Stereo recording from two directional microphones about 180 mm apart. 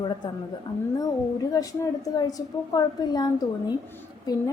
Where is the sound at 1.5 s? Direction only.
20° left (ahead or behind).